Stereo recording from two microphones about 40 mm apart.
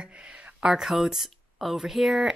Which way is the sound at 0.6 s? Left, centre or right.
Centre.